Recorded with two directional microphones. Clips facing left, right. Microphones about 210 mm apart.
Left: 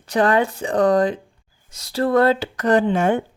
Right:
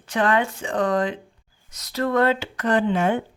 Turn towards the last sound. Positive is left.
turn(degrees=45)  # may be behind; listen again after turning